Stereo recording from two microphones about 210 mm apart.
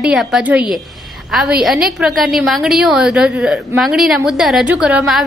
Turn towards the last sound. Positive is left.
turn(degrees=0)  # may be behind; listen again after turning